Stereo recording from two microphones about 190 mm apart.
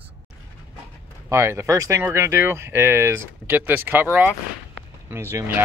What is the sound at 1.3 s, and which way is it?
Speech, 15° right (ahead or behind).